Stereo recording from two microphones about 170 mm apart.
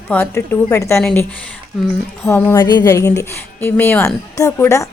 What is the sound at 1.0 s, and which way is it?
Speech, 5° left (ahead or behind).